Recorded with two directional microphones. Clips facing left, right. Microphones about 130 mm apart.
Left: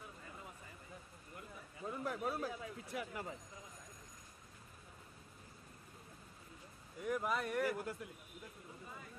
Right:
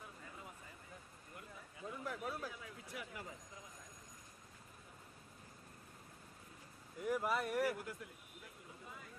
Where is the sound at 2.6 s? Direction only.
30° left (ahead or behind).